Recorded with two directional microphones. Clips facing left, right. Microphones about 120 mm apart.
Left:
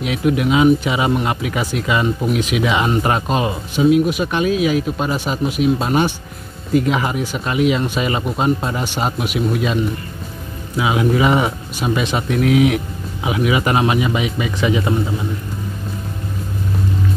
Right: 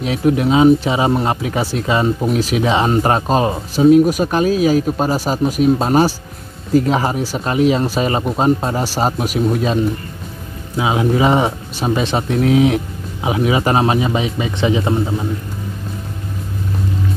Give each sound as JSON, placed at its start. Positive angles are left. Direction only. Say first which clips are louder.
{"t": 0.0, "sound": "speech", "louder": "right 2 dB", "side_deg": -35}